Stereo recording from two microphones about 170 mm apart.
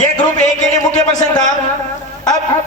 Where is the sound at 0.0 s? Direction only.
45° left (ahead or behind).